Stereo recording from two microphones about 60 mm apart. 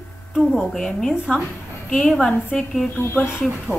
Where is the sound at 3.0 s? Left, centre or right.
Left.